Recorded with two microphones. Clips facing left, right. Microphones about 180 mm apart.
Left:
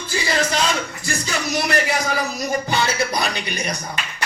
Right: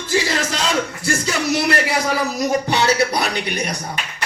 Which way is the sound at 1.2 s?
80° right.